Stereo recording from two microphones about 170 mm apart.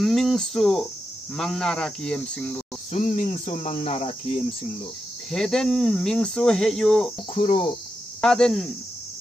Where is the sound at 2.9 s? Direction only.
45° left (ahead or behind).